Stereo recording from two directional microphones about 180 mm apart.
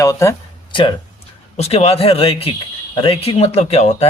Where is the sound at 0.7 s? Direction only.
25° left (ahead or behind).